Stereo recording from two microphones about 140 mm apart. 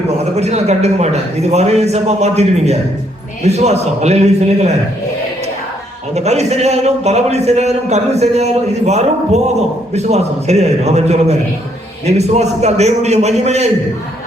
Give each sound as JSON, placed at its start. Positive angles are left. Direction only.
{"t": 0.3, "sound": "a man's voice", "side_deg": -50}
{"t": 6.1, "sound": "a man's voice", "side_deg": -50}